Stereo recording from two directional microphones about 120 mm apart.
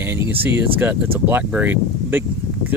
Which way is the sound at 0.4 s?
15° right (ahead or behind).